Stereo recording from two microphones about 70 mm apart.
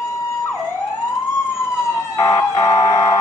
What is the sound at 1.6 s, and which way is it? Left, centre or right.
Emergency vehicle, left.